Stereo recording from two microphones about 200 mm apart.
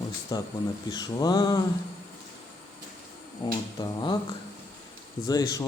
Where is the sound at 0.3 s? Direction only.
20° left (ahead or behind).